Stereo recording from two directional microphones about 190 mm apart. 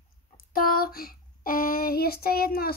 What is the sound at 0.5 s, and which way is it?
Child singing, 50° left (ahead or behind).